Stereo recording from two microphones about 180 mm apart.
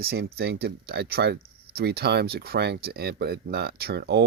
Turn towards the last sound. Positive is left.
turn(degrees=-65)  # may be behind; listen again after turning